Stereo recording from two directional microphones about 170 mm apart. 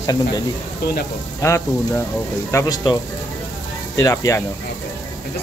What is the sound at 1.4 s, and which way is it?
Speech, 15° left (ahead or behind).